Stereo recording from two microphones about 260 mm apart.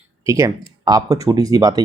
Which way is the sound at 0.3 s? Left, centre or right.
Centre.